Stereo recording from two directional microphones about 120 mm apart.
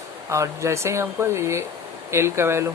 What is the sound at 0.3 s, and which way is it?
Speech, 25° right (ahead or behind).